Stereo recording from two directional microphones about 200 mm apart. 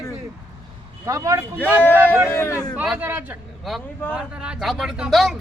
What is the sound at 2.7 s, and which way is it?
Speech, 5° right (ahead or behind).